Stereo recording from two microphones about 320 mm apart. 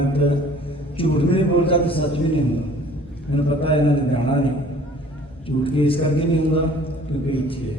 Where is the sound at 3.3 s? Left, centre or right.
Centre.